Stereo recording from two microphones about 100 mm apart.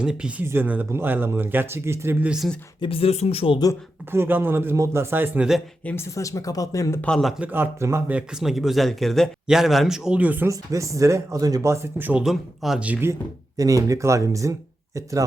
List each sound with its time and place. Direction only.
0.0 s speech: 10° right (ahead or behind); by 2.1 s 25° right (ahead or behind)
2.2 s speech: 5° right (ahead or behind)
2.8 s speech: 70° left (ahead or behind)
4.1 s speech: 20° right (ahead or behind)
5.8 s speech: 20° left (ahead or behind)
7.2 s a man's voice: centre (ahead or behind)
7.4 s speech: 20° right (ahead or behind)
8.0 s a man's voice: 10° right (ahead or behind)
10.5 s speech: 35° right (ahead or behind)
12.2 s a man's voice: 5° right (ahead or behind)
12.8 s speech: 15° right (ahead or behind)
13.6 s speech: 35° right (ahead or behind)